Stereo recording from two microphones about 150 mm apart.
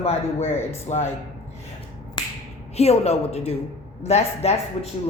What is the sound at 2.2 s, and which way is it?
Finger snapping, 30° left (ahead or behind).